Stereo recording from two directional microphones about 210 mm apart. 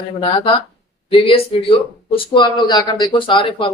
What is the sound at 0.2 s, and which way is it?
Speech, 25° left (ahead or behind).